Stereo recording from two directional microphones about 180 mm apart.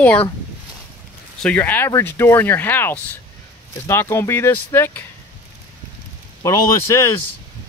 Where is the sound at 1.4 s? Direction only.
10° left (ahead or behind).